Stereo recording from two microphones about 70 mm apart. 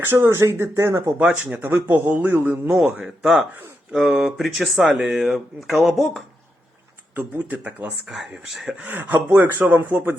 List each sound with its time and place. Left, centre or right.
0.0 s speech: right
1.2 s speech: centre
1.9 s speech: right
3.9 s speech: centre
7.2 s speech: right
8.0 s speech: centre
8.8 s speech: right